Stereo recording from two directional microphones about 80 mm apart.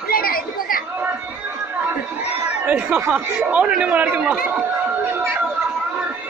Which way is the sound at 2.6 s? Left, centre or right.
Centre.